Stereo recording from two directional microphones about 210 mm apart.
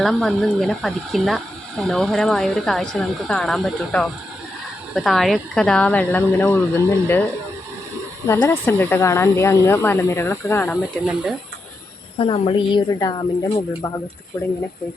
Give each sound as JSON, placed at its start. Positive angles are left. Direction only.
{"t": 0.0, "sound": "speech", "side_deg": 0}
{"t": 8.3, "sound": "speech", "side_deg": 10}
{"t": 11.0, "sound": "speech", "side_deg": -5}
{"t": 12.2, "sound": "a woman's voice", "side_deg": 25}
{"t": 14.3, "sound": "speech", "side_deg": 15}